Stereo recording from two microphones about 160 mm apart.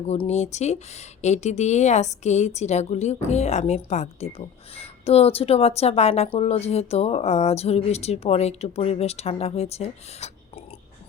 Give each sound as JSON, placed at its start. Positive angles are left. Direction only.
{"t": 0.1, "sound": "speech", "side_deg": 45}